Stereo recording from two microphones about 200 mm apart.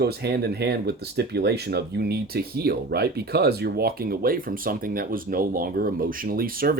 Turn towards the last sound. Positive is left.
turn(degrees=-45)  # may be behind; listen again after turning